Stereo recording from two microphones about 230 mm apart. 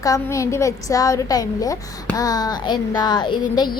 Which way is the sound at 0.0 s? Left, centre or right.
Centre.